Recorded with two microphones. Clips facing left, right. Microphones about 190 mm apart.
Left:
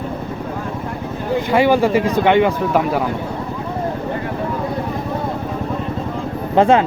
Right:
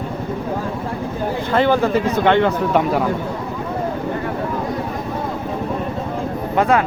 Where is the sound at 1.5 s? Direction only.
10° left (ahead or behind).